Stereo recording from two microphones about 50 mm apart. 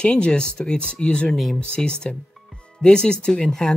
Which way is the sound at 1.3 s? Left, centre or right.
Centre.